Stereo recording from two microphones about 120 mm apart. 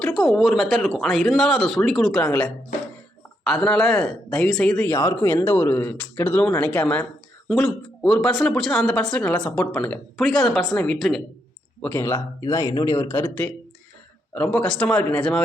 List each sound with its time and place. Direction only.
0.0 s speech: 5° left (ahead or behind)
2.2 s speech: 10° left (ahead or behind)
4.9 s speech: 20° left (ahead or behind)
7.4 s speech: centre (ahead or behind)
11.8 s speech: 15° left (ahead or behind)